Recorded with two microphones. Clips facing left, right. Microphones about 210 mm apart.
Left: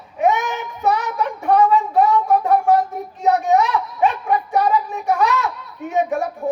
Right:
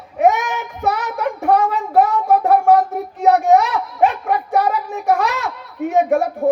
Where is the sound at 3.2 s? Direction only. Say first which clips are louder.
Right 3 dB; 80° right.